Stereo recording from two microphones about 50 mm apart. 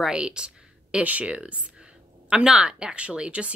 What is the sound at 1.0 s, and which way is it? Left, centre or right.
A woman's voice, right.